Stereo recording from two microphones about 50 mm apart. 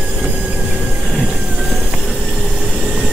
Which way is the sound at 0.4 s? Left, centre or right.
Right.